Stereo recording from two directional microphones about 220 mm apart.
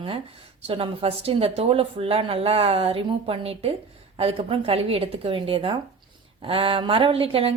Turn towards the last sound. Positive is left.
turn(degrees=-25)  # may be behind; listen again after turning